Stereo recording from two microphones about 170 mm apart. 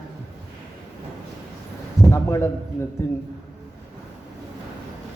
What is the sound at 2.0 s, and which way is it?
Speech, 15° left (ahead or behind).